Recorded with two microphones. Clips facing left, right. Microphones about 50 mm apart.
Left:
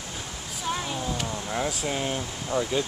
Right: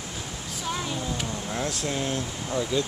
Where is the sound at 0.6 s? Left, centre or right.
Centre.